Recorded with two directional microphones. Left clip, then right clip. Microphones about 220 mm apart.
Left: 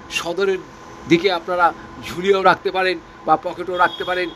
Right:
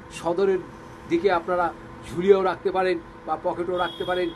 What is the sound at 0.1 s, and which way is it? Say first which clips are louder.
Speech: left 3 dB; 35° left (ahead or behind).